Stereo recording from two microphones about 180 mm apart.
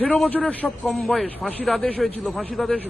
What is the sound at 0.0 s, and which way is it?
A man's voice, 5° left (ahead or behind).